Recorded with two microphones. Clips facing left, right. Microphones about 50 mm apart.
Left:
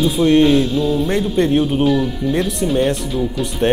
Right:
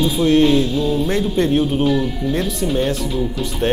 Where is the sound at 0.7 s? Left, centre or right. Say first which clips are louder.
Left 1 dB; centre.